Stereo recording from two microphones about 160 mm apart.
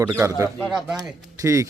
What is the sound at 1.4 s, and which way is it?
Speech, 20° right (ahead or behind).